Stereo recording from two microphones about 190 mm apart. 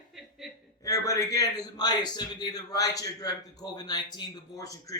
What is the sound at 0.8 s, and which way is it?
A man's voice, 20° left (ahead or behind).